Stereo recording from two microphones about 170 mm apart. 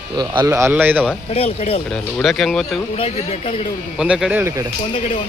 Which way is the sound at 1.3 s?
35° left (ahead or behind).